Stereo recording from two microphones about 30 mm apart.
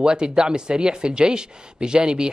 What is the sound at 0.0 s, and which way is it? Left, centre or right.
Speech, right.